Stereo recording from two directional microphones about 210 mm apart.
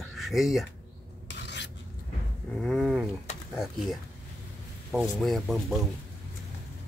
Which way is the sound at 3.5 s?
Centre (ahead or behind).